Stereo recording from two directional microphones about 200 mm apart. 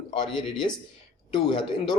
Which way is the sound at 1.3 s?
25° left (ahead or behind).